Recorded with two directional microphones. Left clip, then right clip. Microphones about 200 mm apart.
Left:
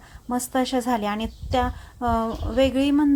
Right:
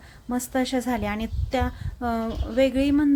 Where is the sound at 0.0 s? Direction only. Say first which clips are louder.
Left 2 dB; centre (ahead or behind).